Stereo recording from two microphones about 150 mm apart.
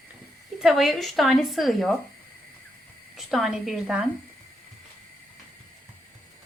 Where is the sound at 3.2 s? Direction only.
Centre (ahead or behind).